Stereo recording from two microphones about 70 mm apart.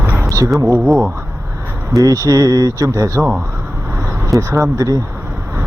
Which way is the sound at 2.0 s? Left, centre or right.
Right.